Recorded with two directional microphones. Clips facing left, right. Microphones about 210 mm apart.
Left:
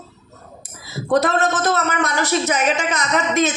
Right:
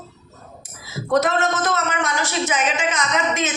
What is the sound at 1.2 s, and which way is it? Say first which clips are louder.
A woman's voice: left 2 dB; 35° left (ahead or behind).